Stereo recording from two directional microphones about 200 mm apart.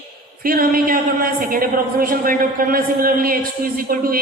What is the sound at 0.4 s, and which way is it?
A woman's voice, 45° right (ahead or behind).